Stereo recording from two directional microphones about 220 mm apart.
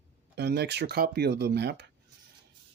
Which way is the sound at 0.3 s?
50° right (ahead or behind).